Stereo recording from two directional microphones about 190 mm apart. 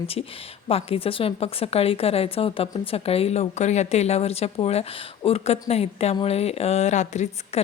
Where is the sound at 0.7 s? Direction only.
30° left (ahead or behind).